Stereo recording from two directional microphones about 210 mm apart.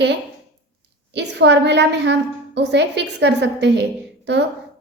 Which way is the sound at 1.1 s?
55° right (ahead or behind).